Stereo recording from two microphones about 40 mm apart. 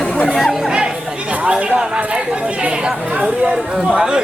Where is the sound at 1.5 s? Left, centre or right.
Right.